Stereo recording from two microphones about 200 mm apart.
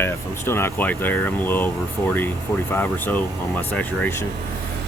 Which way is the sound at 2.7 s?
10° left (ahead or behind).